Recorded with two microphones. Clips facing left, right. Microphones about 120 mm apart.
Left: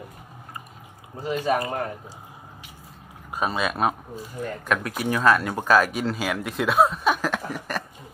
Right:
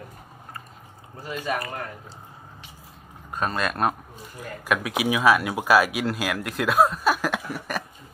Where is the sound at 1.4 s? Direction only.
25° left (ahead or behind).